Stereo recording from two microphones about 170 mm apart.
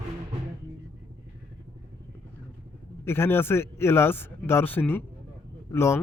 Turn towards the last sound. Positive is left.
turn(degrees=15)  # may be behind; listen again after turning